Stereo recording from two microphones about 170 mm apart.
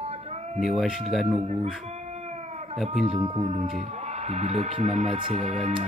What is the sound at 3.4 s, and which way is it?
Speech, 40° right (ahead or behind).